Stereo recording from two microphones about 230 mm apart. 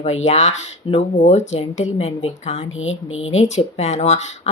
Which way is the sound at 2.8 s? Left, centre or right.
Left.